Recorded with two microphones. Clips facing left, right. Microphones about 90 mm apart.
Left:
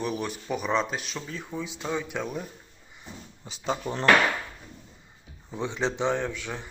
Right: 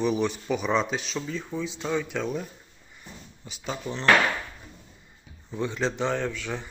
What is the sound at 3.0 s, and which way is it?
Speech, 30° left (ahead or behind).